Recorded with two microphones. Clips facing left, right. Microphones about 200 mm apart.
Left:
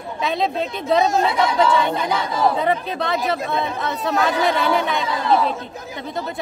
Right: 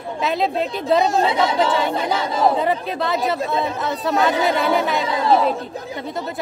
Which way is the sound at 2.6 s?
Centre (ahead or behind).